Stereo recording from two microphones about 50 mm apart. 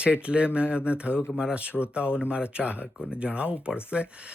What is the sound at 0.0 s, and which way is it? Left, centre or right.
Speech, right.